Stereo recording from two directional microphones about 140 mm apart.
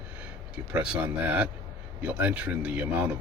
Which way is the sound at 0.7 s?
10° right (ahead or behind).